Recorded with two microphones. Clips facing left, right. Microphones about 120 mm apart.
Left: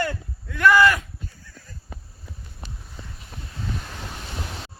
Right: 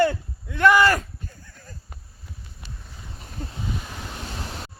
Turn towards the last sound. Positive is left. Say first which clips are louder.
# right 5 dB
turn(degrees=-40)  # may be behind; listen again after turning